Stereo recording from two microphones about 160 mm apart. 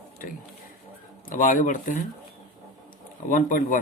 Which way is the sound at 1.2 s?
55° left (ahead or behind).